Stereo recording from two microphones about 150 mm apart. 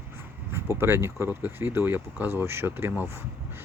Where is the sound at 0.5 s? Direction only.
15° right (ahead or behind).